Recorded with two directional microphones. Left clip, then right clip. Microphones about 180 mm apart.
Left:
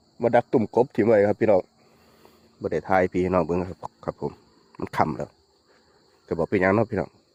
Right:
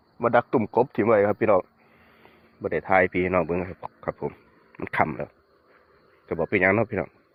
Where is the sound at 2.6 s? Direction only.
40° left (ahead or behind).